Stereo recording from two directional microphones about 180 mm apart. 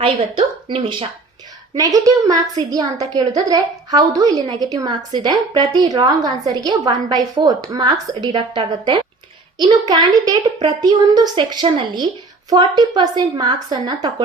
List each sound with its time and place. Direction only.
0.0 s a woman's voice: 30° right (ahead or behind)
1.7 s a woman's voice: 20° right (ahead or behind)